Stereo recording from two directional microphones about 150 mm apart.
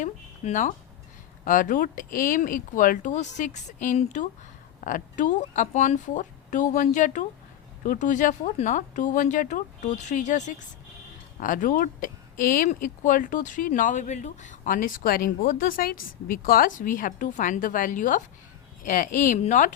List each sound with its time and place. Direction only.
0.0 s speech: 55° left (ahead or behind)
11.3 s speech: 65° left (ahead or behind)